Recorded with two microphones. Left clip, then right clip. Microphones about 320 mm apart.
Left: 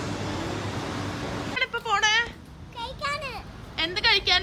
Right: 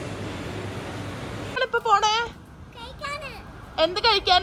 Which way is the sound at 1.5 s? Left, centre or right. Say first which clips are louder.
Right 5 dB; centre.